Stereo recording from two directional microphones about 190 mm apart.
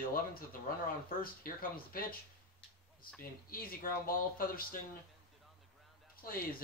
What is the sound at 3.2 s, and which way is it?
Speech, 50° left (ahead or behind).